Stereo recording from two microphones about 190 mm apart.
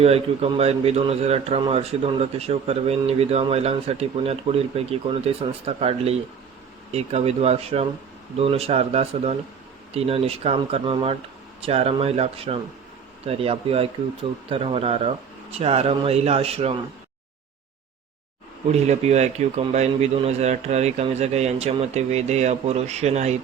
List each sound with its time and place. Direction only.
0.0 s a man's voice: 30° right (ahead or behind)
18.7 s a man's voice: 35° right (ahead or behind)